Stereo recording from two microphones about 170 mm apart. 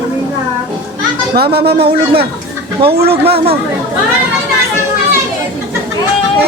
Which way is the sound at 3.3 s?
35° right (ahead or behind).